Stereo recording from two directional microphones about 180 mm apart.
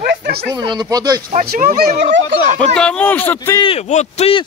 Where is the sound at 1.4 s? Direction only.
55° right (ahead or behind).